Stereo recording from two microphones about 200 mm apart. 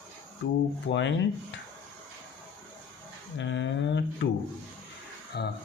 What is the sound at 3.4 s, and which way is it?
Speech, 65° left (ahead or behind).